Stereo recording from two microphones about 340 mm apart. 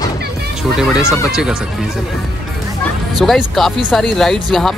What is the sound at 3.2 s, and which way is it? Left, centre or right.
Speech, centre.